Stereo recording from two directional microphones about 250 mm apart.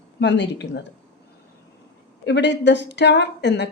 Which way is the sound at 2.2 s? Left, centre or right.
Left.